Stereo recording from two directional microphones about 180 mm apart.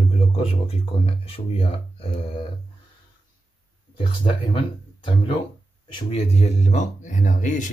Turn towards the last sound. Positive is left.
turn(degrees=45)  # may be behind; listen again after turning